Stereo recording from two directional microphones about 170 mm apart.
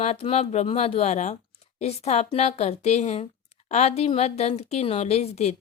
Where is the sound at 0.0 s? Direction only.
35° left (ahead or behind).